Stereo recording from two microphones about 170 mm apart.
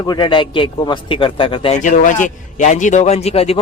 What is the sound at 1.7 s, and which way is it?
A man's voice, 45° left (ahead or behind).